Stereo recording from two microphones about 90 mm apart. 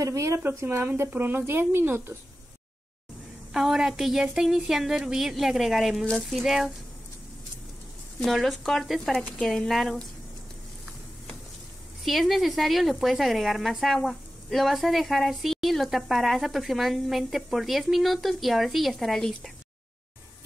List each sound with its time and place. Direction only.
0.0 s a woman's voice: 35° right (ahead or behind)
3.5 s speech: 5° right (ahead or behind)
8.2 s speech: centre (ahead or behind)
12.0 s speech: centre (ahead or behind)